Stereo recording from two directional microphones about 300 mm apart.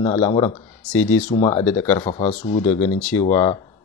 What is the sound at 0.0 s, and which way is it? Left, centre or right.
Speech, centre.